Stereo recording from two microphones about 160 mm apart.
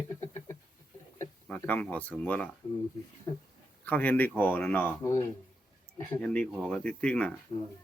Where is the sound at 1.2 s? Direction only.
10° left (ahead or behind).